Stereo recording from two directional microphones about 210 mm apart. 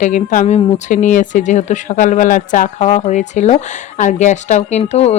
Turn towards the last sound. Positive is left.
turn(degrees=30)  # may be behind; listen again after turning